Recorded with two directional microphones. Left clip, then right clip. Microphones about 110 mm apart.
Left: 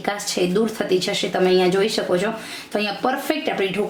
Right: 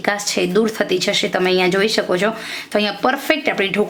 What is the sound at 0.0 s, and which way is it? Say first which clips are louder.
Speech: right 4 dB; 40° right (ahead or behind).